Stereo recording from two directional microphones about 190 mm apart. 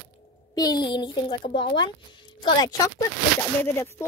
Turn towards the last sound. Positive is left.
turn(degrees=15)  # may be behind; listen again after turning